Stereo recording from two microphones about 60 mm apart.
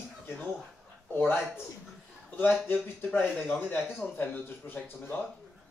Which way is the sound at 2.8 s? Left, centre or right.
Left.